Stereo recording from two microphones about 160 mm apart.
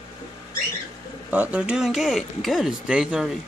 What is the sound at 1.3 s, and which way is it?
Speech, 10° right (ahead or behind).